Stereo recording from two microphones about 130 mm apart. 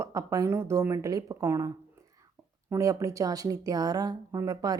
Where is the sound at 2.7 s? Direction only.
25° right (ahead or behind).